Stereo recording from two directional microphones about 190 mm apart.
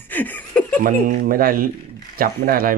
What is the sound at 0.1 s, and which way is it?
Laughter, 10° left (ahead or behind).